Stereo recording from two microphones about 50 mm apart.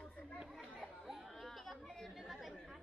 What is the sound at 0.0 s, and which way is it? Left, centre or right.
Chatter, centre.